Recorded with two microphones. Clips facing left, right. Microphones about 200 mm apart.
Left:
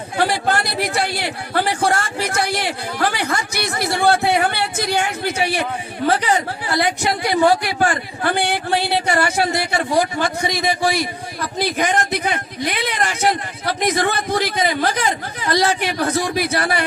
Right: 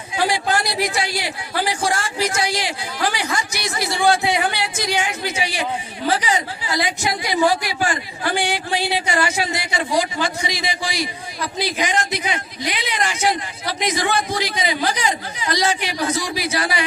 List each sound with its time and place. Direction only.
0.1 s a woman's voice: 60° left (ahead or behind)